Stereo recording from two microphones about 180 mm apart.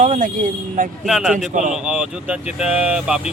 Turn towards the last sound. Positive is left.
turn(degrees=-5)  # may be behind; listen again after turning